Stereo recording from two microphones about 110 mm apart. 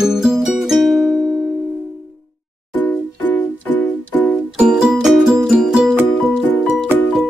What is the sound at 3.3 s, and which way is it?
Music, 15° left (ahead or behind).